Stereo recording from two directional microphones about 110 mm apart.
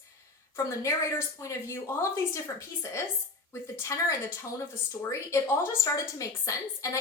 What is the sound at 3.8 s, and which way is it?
A woman's voice, 30° left (ahead or behind).